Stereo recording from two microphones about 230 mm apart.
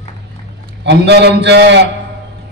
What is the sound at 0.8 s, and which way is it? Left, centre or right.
A man's voice, right.